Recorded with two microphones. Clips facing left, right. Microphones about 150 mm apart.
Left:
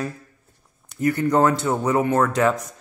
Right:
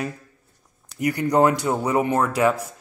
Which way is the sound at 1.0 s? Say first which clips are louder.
Even; 15° right (ahead or behind).